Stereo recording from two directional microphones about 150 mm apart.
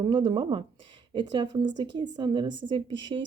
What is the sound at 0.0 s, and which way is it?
A woman's voice, 30° right (ahead or behind).